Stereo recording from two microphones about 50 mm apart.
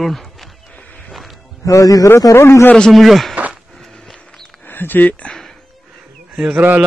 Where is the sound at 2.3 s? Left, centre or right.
Left.